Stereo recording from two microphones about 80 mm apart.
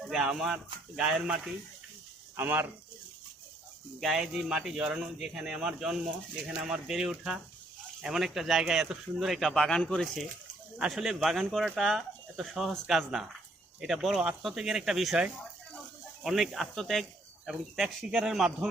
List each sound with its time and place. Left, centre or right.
0.1 s speech: centre
2.3 s speech: right
4.0 s speech: centre
10.8 s speech: centre
16.2 s speech: centre